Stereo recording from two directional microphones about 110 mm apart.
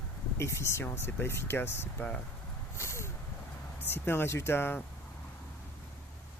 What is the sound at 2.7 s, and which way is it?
Vehicle, 25° left (ahead or behind).